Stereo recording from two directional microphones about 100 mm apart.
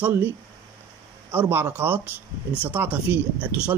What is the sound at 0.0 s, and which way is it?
Speech, 20° right (ahead or behind).